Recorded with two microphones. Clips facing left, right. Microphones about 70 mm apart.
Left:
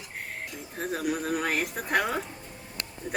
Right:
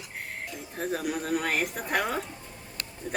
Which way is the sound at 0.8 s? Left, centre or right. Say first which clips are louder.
Left 1 dB; centre.